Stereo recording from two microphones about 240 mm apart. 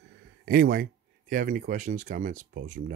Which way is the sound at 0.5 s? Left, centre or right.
Right.